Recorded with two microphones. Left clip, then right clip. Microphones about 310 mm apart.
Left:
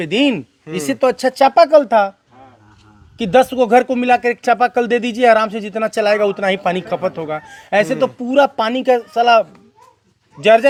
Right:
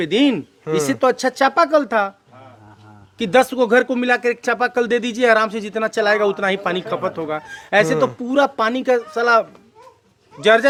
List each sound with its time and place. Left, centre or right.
0.0 s speech: left
3.2 s speech: left